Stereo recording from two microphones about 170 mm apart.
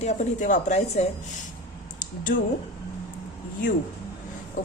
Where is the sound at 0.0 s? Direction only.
45° left (ahead or behind).